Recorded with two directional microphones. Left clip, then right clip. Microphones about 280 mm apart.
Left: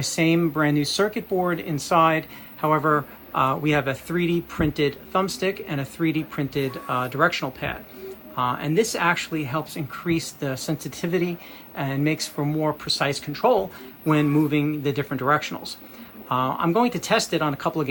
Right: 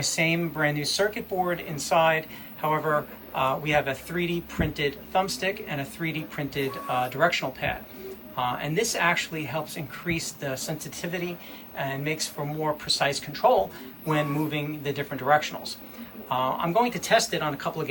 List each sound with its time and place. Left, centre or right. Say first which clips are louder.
0.0 s speech: left 4 dB; centre
3.3 s speech: left 3 dB; centre